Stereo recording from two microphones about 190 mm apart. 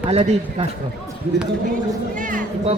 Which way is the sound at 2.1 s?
45° right (ahead or behind).